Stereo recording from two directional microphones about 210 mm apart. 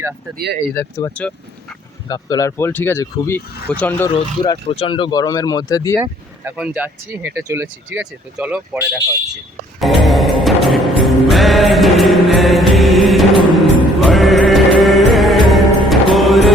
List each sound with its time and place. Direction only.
0.7 s speech: 10° left (ahead or behind)
4.1 s speech: 25° left (ahead or behind)
6.0 s speech: 5° right (ahead or behind)
9.8 s music: centre (ahead or behind)